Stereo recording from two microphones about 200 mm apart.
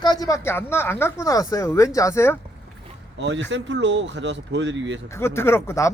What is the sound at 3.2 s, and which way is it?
Speech, 65° right (ahead or behind).